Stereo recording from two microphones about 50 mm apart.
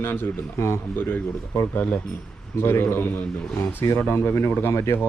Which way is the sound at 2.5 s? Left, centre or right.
Left.